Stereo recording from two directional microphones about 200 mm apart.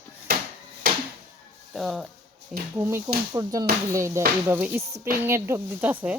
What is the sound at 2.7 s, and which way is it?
A woman's voice, 10° right (ahead or behind).